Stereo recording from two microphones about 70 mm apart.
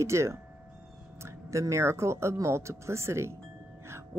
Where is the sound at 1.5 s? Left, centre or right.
Right.